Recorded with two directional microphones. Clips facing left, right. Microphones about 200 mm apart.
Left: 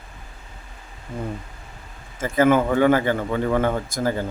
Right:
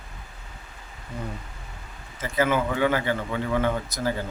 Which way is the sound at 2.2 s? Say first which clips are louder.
Left 6 dB; 50° left (ahead or behind).